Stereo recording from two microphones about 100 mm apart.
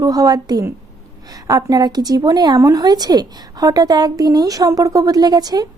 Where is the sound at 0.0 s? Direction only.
35° right (ahead or behind).